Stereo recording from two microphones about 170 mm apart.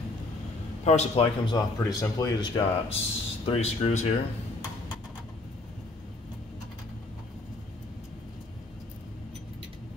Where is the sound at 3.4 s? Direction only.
35° left (ahead or behind).